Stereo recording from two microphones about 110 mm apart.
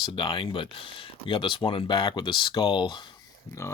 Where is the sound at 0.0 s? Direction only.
50° left (ahead or behind).